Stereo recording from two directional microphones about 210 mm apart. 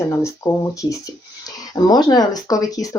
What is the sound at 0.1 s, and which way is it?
Speech, 15° left (ahead or behind).